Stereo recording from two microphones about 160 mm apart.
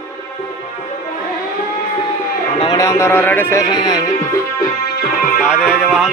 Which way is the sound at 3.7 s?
25° left (ahead or behind).